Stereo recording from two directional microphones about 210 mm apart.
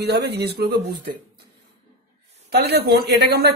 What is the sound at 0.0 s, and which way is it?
A woman's voice, 50° right (ahead or behind).